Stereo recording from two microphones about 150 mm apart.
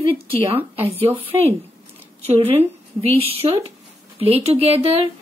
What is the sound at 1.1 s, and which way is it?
A woman's voice, 40° right (ahead or behind).